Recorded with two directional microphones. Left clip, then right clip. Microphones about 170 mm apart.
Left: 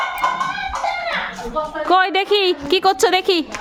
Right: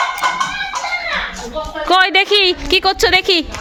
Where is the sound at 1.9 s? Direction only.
5° left (ahead or behind).